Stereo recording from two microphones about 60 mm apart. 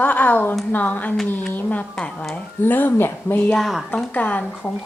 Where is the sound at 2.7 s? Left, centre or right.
Left.